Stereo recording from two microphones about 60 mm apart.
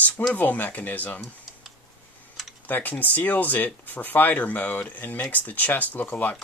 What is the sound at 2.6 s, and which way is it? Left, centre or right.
Speech, left.